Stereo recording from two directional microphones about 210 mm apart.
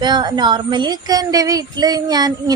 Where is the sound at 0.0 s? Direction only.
20° right (ahead or behind).